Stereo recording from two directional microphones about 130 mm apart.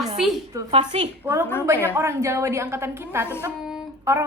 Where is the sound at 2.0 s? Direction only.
20° right (ahead or behind).